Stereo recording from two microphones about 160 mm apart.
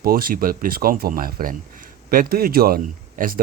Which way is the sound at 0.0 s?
65° right (ahead or behind).